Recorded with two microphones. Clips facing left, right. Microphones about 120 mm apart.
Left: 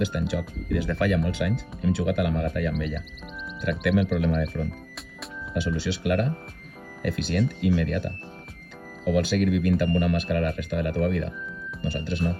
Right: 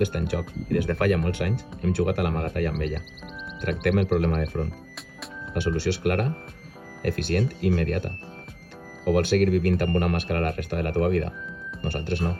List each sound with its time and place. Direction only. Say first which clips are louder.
0.0 s speech: right 1 dB; 55° right (ahead or behind)
9.1 s speech: right 2 dB; 55° right (ahead or behind)